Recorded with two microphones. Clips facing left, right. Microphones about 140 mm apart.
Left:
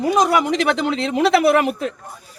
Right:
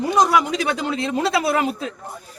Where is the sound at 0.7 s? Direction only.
70° left (ahead or behind).